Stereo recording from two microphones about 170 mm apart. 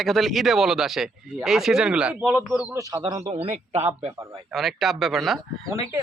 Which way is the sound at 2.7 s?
20° right (ahead or behind).